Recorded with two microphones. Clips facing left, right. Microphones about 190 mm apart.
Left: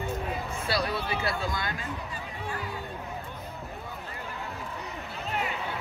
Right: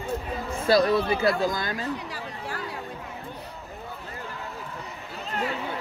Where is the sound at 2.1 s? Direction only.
85° right.